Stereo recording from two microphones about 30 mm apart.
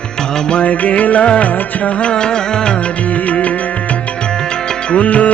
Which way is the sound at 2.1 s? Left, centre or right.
Left.